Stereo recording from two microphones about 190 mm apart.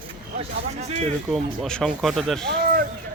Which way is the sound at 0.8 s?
35° right (ahead or behind).